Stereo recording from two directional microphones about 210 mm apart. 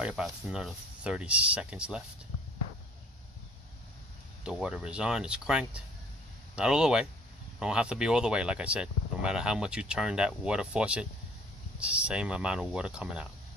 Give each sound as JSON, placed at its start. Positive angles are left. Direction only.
{"t": 0.0, "sound": "speech", "side_deg": -5}
{"t": 4.4, "sound": "speech", "side_deg": -5}